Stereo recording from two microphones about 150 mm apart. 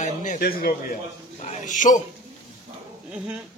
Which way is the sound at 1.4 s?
55° left (ahead or behind).